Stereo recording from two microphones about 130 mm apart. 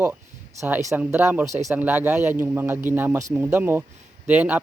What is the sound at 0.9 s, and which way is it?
Speech, 15° right (ahead or behind).